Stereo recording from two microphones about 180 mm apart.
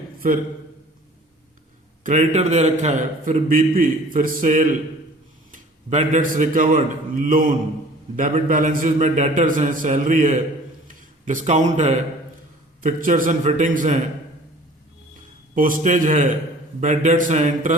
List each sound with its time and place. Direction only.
2.0 s a man's voice: 40° right (ahead or behind)
15.5 s a man's voice: 50° right (ahead or behind)